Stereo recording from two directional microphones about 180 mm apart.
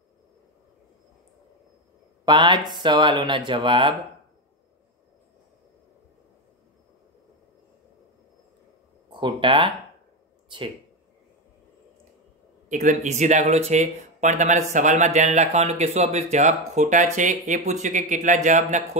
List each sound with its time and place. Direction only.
2.2 s speech: 25° right (ahead or behind)
9.1 s speech: 25° right (ahead or behind)
12.6 s speech: 40° right (ahead or behind)